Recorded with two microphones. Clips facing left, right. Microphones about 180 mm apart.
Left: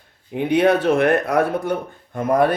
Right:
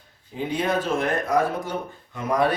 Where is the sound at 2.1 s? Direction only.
50° left (ahead or behind).